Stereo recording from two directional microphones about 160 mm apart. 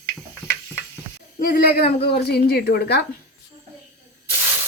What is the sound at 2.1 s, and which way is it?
Speech, 90° left.